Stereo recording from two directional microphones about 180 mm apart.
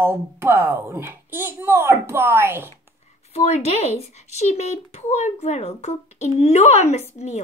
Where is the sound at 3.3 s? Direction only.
40° left (ahead or behind).